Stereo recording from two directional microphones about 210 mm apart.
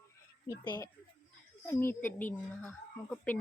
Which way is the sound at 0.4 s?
15° left (ahead or behind).